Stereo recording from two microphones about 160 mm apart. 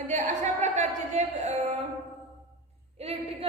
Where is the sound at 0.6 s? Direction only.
45° right (ahead or behind).